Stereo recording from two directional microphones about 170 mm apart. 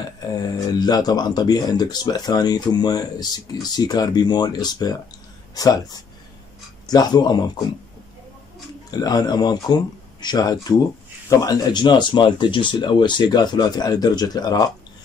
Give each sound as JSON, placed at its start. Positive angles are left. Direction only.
{"t": 0.7, "sound": "speech", "side_deg": 25}
{"t": 9.0, "sound": "speech", "side_deg": 25}